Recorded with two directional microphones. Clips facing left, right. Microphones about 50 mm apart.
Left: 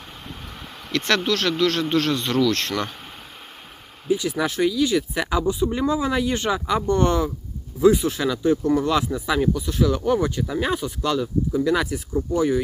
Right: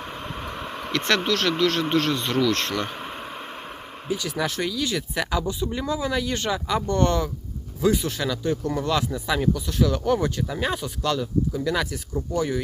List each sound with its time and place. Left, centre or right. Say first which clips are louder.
0.9 s speech: left 1 dB; right
1.2 s speech: left 1 dB; right
2.6 s bee: left 1 dB; centre
4.1 s speech: left 4 dB; centre